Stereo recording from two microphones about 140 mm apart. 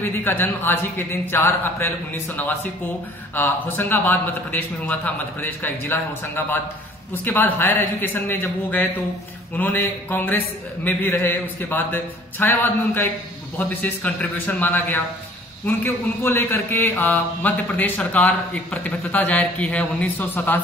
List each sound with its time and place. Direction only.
0.0 s a man's voice: 15° left (ahead or behind)